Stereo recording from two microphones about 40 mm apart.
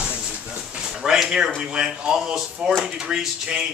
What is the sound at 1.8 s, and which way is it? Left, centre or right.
Speech, centre.